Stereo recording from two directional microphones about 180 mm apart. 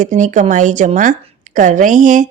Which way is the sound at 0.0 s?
45° right (ahead or behind).